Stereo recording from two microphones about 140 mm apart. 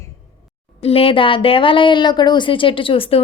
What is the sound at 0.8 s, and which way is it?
Speech, 45° left (ahead or behind).